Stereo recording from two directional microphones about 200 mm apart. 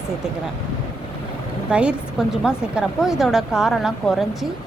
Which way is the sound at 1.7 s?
5° right (ahead or behind).